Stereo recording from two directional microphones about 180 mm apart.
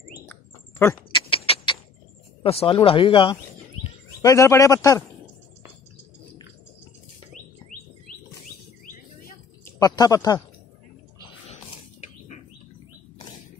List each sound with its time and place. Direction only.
0.3 s bird: 15° left (ahead or behind)
1.1 s vehicle: 30° left (ahead or behind)
2.4 s speech: 30° left (ahead or behind)
4.2 s a man's voice: 15° left (ahead or behind)
9.7 s speech: 20° left (ahead or behind)